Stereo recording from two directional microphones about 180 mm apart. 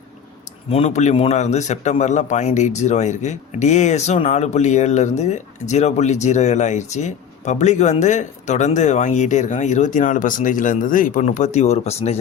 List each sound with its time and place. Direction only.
0.7 s a man's voice: 35° left (ahead or behind)